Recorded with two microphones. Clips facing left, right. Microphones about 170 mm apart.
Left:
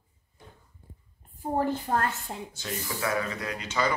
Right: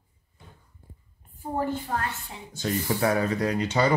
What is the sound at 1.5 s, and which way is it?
Speech, 45° left (ahead or behind).